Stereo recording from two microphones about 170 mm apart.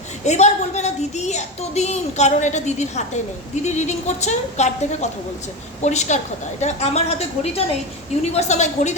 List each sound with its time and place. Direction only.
0.3 s a woman's voice: 40° left (ahead or behind)